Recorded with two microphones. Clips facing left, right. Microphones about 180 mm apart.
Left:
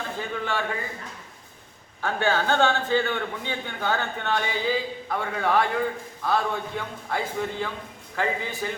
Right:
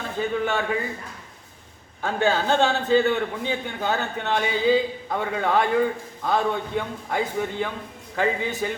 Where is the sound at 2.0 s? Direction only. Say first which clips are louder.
Right 2 dB; 20° right (ahead or behind).